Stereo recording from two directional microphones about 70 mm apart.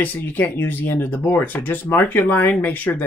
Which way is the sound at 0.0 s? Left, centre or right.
Left.